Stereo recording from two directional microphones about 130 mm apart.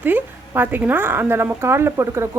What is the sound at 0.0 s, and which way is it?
A woman's voice, 15° right (ahead or behind).